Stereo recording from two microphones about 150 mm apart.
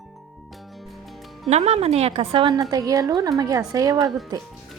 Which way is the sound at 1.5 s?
45° right (ahead or behind).